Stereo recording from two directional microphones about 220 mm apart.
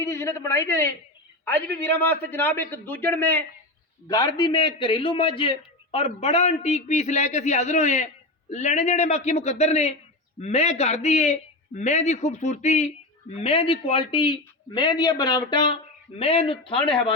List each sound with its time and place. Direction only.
0.0 s a man's voice: 10° left (ahead or behind)
4.0 s a man's voice: 20° left (ahead or behind)